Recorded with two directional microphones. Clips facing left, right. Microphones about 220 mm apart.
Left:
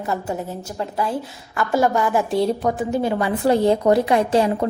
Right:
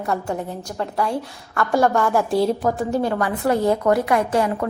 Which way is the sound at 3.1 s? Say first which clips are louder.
Left 2 dB; 25° left (ahead or behind).